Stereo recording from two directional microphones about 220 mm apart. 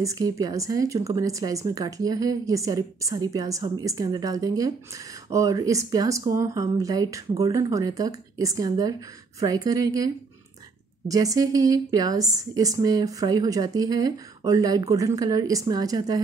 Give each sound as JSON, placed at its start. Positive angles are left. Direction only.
{"t": 0.0, "sound": "speech", "side_deg": -15}